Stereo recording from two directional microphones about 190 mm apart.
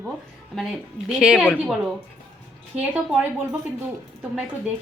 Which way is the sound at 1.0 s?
5° right (ahead or behind).